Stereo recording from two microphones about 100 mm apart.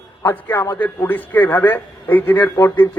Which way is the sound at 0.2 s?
25° left (ahead or behind).